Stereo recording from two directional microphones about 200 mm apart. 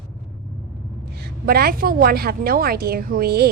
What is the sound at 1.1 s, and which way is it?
A woman's voice, 50° right (ahead or behind).